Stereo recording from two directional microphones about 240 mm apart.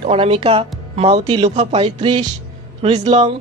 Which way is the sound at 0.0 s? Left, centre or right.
Right.